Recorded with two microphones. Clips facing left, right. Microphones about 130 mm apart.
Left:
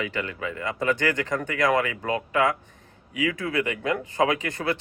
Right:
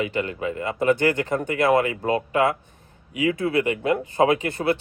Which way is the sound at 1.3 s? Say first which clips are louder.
Right 3 dB; 35° right (ahead or behind).